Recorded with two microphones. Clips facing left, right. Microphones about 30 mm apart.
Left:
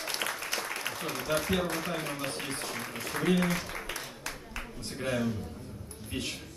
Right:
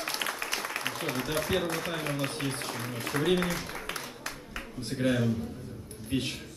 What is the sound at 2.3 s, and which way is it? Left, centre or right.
Speech, right.